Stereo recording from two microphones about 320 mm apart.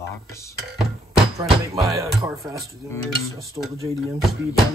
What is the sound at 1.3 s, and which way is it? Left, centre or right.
Speech, centre.